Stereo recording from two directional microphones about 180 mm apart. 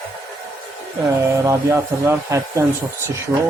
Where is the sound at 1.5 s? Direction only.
15° right (ahead or behind).